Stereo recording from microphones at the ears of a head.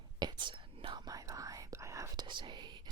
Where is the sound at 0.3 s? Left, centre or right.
Right.